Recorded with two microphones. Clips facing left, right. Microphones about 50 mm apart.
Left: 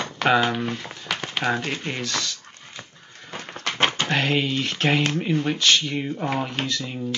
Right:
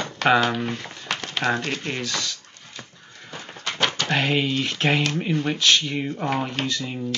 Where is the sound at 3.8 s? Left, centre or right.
Left.